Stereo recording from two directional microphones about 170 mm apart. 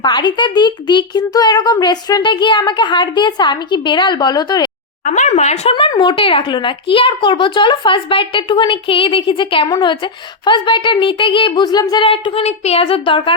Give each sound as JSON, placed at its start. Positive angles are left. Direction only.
{"t": 0.0, "sound": "a child's voice", "side_deg": 25}
{"t": 5.0, "sound": "speech", "side_deg": 45}
{"t": 5.9, "sound": "a child's voice", "side_deg": 25}